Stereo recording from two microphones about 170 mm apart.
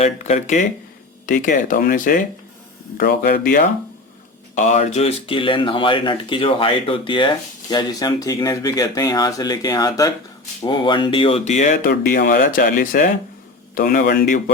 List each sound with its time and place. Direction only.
0.0 s speech: 40° left (ahead or behind); by 3.7 s 60° left (ahead or behind)
4.5 s speech: 45° left (ahead or behind)